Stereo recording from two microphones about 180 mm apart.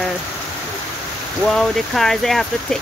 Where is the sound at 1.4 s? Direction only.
Centre (ahead or behind).